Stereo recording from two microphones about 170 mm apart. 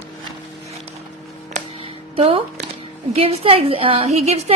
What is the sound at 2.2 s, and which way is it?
A woman's voice, 35° right (ahead or behind).